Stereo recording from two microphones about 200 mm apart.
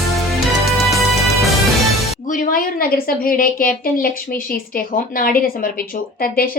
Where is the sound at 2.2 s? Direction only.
40° left (ahead or behind).